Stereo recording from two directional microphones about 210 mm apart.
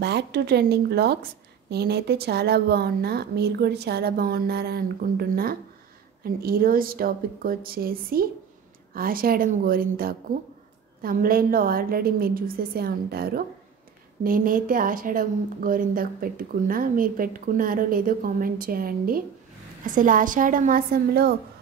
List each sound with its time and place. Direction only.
0.0 s a woman's voice: 50° right (ahead or behind)